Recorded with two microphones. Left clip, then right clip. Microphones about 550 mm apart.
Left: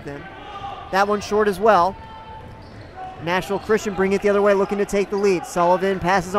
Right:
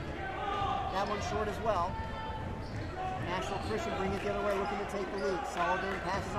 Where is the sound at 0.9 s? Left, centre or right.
Left.